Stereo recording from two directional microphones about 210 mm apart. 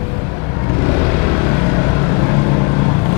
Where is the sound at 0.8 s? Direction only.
20° left (ahead or behind).